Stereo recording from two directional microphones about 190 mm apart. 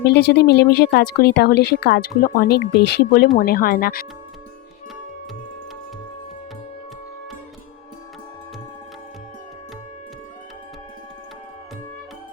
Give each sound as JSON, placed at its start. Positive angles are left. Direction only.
{"t": 0.1, "sound": "speech", "side_deg": 60}